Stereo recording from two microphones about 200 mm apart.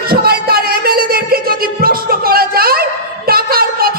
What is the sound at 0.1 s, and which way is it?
Music, 50° right (ahead or behind).